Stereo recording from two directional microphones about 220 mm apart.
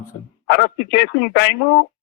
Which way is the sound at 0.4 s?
50° left (ahead or behind).